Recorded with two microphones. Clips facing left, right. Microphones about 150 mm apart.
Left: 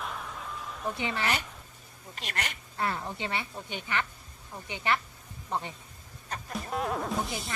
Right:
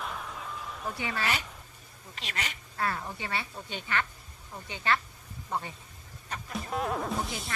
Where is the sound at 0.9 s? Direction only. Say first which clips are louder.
Left 1 dB; 20° left (ahead or behind).